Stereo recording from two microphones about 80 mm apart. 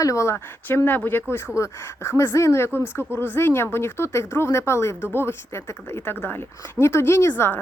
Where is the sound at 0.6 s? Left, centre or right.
Left.